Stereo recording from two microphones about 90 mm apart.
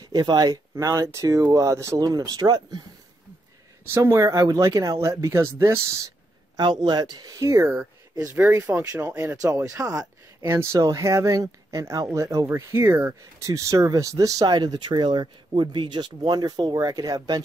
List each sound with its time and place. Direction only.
0.0 s speech: 50° right (ahead or behind)
2.0 s speech: 50° right (ahead or behind)
3.8 s speech: 30° right (ahead or behind)
6.6 s speech: 55° right (ahead or behind); by 7.6 s 35° right (ahead or behind)
7.6 s speech: 20° right (ahead or behind); by 10.5 s 40° right (ahead or behind)
10.5 s speech: 30° right (ahead or behind)
13.2 s speech: 35° right (ahead or behind)